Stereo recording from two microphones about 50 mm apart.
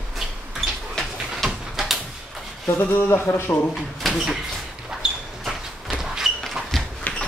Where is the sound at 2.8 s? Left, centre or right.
Left.